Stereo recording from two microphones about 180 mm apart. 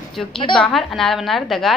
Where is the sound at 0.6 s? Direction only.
Centre (ahead or behind).